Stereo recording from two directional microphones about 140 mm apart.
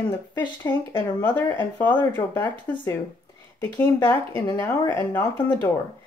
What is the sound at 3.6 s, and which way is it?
Speech, 30° left (ahead or behind).